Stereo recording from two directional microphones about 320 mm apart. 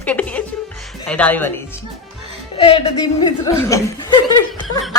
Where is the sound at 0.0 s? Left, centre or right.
Centre.